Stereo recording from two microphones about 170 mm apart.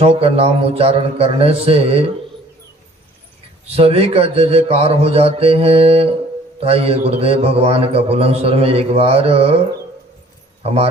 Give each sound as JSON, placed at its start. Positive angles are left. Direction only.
{"t": 0.0, "sound": "a man's voice", "side_deg": -35}
{"t": 3.8, "sound": "a man's voice", "side_deg": -35}
{"t": 10.6, "sound": "speech", "side_deg": -35}